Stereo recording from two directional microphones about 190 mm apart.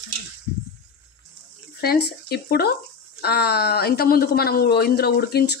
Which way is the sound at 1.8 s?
55° left (ahead or behind).